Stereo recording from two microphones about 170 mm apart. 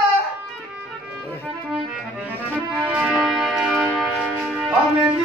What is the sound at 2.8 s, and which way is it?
Music, 5° right (ahead or behind).